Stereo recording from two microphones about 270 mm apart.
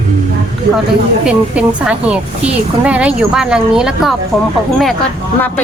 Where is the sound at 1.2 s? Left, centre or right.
Centre.